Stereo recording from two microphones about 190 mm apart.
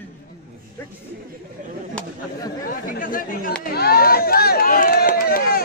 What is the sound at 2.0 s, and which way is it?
Chatter, 5° left (ahead or behind).